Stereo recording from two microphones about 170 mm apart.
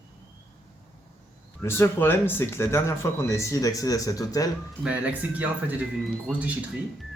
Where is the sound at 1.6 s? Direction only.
15° left (ahead or behind).